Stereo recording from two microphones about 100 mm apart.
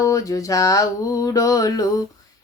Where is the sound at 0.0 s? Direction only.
35° left (ahead or behind).